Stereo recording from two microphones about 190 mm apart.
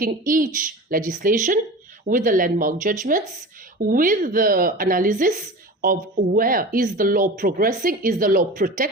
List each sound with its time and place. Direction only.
0.0 s speech: 45° right (ahead or behind)